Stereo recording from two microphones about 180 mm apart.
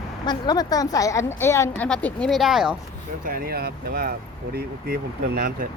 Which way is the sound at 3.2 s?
55° right (ahead or behind).